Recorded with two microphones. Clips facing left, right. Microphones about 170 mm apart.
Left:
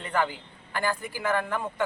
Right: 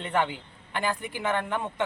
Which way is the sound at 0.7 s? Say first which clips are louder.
Even; 20° right (ahead or behind).